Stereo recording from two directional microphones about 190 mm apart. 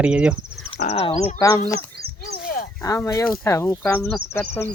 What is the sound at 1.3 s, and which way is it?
Speech, 20° left (ahead or behind).